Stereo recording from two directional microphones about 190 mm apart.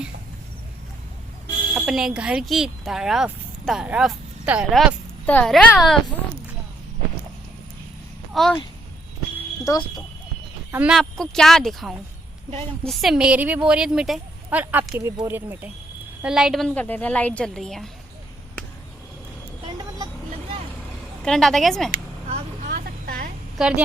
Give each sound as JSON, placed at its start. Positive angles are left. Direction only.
{"t": 1.7, "sound": "speech", "side_deg": -5}
{"t": 8.3, "sound": "a child's voice", "side_deg": 0}
{"t": 9.7, "sound": "speech", "side_deg": 15}
{"t": 10.7, "sound": "a woman's voice", "side_deg": -5}
{"t": 21.2, "sound": "a woman's voice", "side_deg": 5}
{"t": 22.7, "sound": "vehicle", "side_deg": -50}
{"t": 23.6, "sound": "a woman's voice", "side_deg": -5}